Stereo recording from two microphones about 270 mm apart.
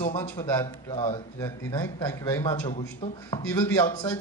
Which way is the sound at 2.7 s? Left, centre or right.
Left.